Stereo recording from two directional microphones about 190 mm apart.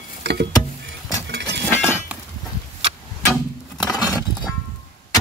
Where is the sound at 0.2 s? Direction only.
60° right (ahead or behind).